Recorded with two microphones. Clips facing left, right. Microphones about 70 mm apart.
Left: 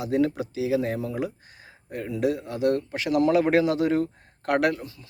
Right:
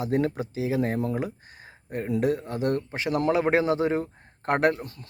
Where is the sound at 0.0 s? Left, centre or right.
Right.